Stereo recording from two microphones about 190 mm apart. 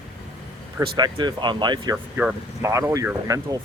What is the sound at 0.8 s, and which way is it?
Speech, 20° right (ahead or behind).